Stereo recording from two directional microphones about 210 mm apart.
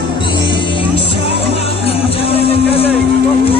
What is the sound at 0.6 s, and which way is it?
Music, 25° left (ahead or behind).